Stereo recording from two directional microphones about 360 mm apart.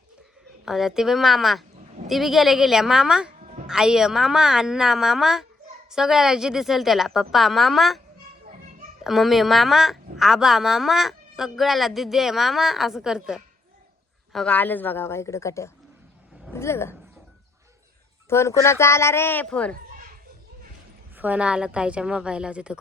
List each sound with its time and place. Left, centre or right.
0.6 s a woman's voice: centre
3.4 s music: centre
3.7 s a woman's voice: centre
9.0 s a woman's voice: centre
18.3 s a woman's voice: centre
19.7 s children playing: right
21.2 s a woman's voice: centre